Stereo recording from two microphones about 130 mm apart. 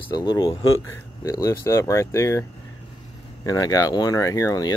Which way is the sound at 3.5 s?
25° left (ahead or behind).